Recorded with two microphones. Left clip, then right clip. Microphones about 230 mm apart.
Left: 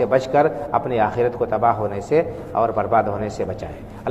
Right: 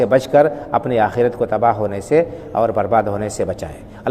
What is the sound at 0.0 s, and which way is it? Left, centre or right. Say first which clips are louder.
A man's voice: right 4 dB; right.